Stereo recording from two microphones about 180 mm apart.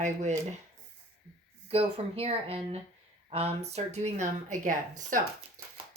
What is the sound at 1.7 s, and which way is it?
A woman's voice, 35° right (ahead or behind).